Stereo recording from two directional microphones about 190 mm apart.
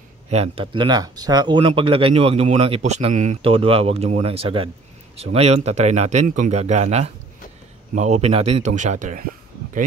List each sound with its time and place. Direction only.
0.3 s speech: 30° right (ahead or behind)